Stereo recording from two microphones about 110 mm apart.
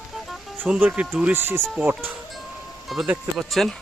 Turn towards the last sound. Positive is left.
turn(degrees=0)  # may be behind; listen again after turning